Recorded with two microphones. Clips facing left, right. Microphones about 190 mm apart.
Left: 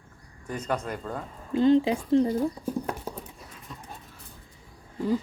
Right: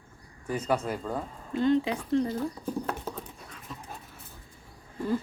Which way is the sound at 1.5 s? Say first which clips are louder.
Left 4 dB; 30° left (ahead or behind).